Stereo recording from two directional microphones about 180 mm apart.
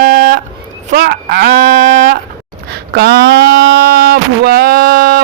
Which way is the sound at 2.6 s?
60° right (ahead or behind).